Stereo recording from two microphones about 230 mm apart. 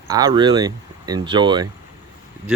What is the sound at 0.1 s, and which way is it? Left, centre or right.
Speech, centre.